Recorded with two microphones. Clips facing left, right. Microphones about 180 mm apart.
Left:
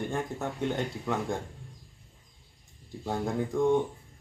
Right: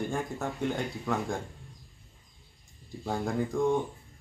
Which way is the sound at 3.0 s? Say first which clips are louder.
Even; centre (ahead or behind).